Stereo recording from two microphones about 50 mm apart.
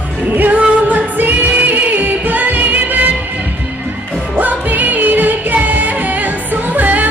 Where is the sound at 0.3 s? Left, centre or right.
Right.